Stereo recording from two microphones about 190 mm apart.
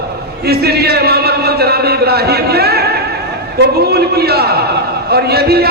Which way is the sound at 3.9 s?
55° right (ahead or behind).